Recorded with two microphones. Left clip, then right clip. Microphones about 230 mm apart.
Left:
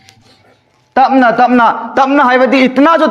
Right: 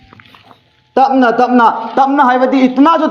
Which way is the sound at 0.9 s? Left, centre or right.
Left.